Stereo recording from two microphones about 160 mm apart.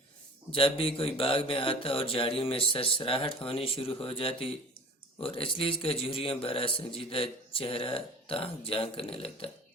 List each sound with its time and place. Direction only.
0.5 s a man's voice: 35° left (ahead or behind)